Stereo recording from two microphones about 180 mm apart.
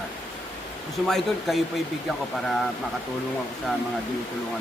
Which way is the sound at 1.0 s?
Centre (ahead or behind).